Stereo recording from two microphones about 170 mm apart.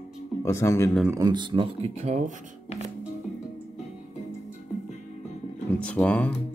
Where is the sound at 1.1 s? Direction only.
25° right (ahead or behind); by 2.3 s 40° right (ahead or behind).